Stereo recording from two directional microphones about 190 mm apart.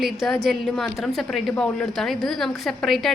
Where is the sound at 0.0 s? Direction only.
Centre (ahead or behind).